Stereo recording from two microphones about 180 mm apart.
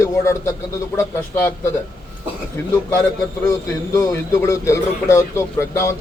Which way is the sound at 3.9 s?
20° left (ahead or behind).